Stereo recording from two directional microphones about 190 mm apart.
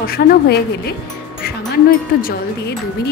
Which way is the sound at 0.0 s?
50° left (ahead or behind).